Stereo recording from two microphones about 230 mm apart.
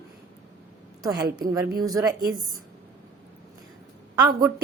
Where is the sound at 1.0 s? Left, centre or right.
Centre.